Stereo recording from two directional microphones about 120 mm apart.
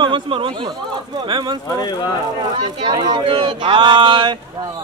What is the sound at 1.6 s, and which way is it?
Speech, 30° left (ahead or behind).